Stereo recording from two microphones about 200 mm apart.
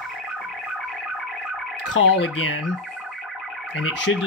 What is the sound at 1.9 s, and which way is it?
Speech, 65° left (ahead or behind).